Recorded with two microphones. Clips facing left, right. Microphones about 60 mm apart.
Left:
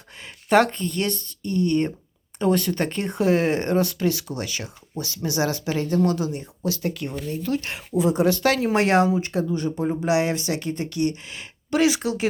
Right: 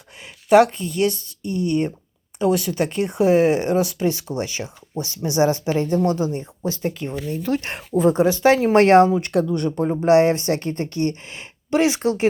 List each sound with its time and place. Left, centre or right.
0.5 s speech: centre
4.0 s speech: right
7.4 s speech: right
8.2 s speech: centre
8.7 s speech: right
9.2 s speech: right
9.8 s speech: right
10.1 s speech: right